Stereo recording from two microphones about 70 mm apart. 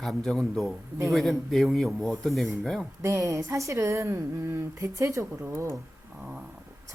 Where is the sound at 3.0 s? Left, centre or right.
Right.